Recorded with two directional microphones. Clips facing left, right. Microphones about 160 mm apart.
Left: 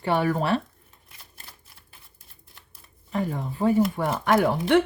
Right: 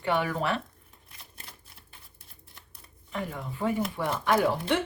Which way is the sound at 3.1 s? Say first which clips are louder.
Left 7 dB; 35° left (ahead or behind).